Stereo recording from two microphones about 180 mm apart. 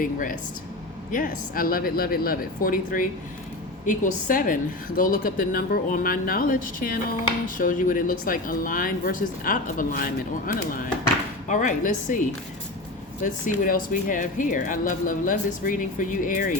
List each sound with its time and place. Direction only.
0.0 s speech: 50° left (ahead or behind)
13.2 s speech: 45° left (ahead or behind)